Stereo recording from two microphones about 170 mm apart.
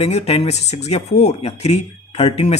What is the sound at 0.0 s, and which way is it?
Speech, 40° left (ahead or behind).